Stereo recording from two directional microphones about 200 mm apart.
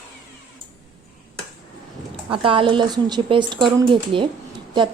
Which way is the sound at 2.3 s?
25° right (ahead or behind).